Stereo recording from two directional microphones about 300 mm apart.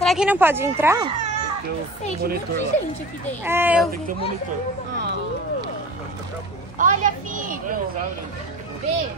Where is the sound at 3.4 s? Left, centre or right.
Centre.